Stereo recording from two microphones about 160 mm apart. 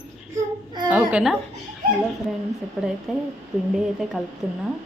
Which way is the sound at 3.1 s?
Centre (ahead or behind).